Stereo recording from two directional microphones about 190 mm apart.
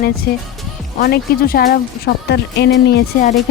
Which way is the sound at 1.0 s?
55° left (ahead or behind).